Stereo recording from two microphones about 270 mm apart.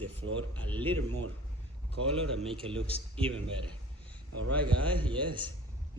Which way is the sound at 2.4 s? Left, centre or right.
Centre.